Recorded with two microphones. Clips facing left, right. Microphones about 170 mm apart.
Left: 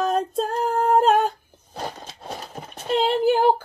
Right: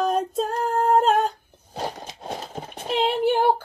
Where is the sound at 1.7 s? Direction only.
15° right (ahead or behind).